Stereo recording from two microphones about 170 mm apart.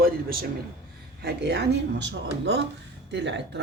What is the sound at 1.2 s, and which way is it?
Speech, 85° right.